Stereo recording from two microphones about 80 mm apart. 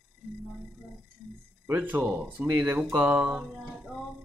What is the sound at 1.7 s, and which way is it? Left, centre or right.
A man's voice, right.